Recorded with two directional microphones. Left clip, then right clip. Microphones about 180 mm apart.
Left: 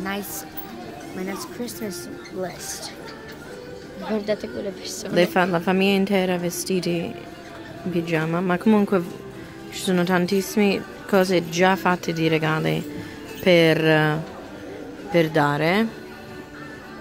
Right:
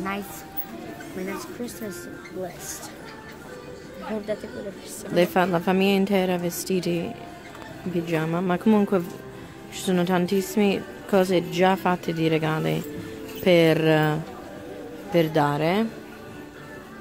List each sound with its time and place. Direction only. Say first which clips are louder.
4.3 s speech: left 5 dB; 35° left (ahead or behind)
5.1 s a woman's voice: left 1 dB; 5° right (ahead or behind)